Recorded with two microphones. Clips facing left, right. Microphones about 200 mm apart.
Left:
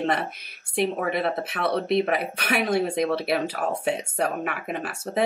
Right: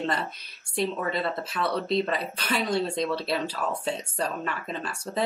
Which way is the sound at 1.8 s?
20° left (ahead or behind).